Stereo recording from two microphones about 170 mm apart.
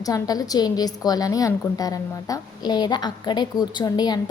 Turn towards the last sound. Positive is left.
turn(degrees=25)  # may be behind; listen again after turning